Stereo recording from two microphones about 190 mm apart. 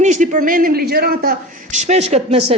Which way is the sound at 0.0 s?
40° right (ahead or behind).